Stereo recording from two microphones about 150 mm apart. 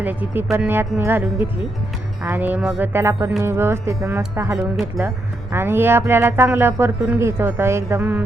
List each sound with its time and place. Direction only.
0.0 s speech: 10° right (ahead or behind)